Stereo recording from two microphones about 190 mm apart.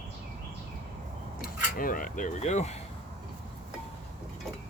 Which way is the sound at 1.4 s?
50° left (ahead or behind).